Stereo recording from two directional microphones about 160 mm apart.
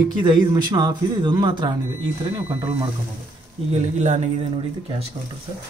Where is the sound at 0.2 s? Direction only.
30° right (ahead or behind).